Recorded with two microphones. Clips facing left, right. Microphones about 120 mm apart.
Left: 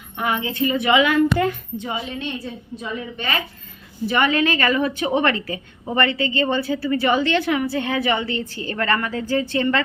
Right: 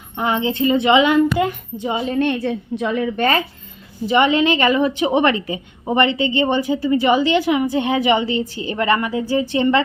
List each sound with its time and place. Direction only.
0.2 s a child's voice: 25° right (ahead or behind)
2.1 s a woman's voice: 60° right (ahead or behind)
4.0 s a child's voice: 20° right (ahead or behind)